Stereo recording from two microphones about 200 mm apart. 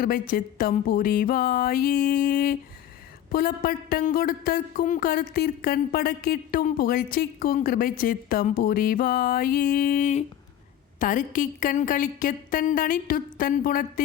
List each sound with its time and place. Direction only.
0.0 s speech: 45° left (ahead or behind)